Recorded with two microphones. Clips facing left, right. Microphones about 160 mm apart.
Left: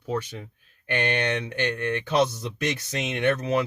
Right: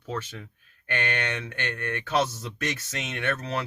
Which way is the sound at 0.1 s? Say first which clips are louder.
Left 5 dB; 15° left (ahead or behind).